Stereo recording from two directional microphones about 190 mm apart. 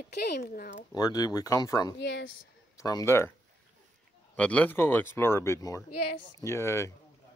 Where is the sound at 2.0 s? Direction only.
70° left (ahead or behind).